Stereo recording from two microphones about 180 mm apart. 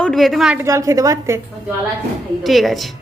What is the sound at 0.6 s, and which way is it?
Speech, 15° right (ahead or behind).